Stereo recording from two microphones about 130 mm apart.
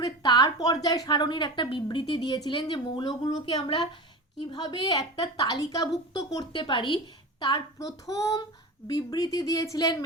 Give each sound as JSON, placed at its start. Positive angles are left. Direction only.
{"t": 0.0, "sound": "a woman's voice", "side_deg": 35}